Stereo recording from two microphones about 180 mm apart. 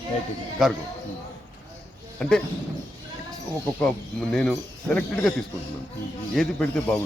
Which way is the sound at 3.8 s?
Centre (ahead or behind).